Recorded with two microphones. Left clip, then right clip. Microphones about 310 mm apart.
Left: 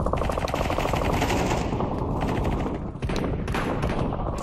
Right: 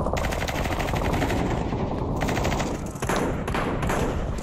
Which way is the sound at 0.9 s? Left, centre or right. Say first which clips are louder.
Left 1 dB; centre.